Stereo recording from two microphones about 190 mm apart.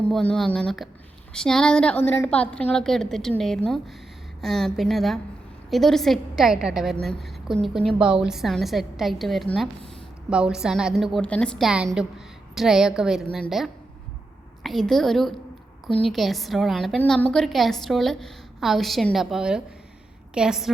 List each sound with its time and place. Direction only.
0.0 s a woman's voice: 5° left (ahead or behind)